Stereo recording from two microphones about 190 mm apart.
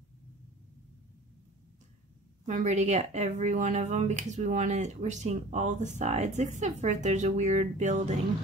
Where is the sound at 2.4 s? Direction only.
40° right (ahead or behind).